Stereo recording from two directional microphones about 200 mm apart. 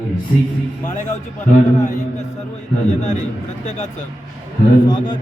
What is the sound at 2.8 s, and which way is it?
A man's voice, 35° left (ahead or behind).